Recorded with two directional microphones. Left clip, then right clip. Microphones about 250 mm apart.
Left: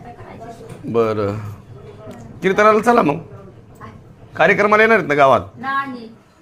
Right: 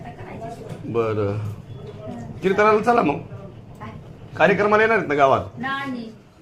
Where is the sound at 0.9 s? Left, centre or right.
Left.